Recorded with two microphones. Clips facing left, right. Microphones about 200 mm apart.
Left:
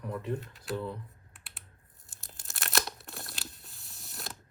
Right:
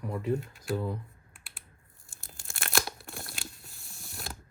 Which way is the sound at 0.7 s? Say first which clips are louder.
Right 3 dB; 40° right (ahead or behind).